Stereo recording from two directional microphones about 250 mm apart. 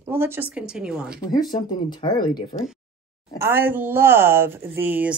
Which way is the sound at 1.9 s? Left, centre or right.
Centre.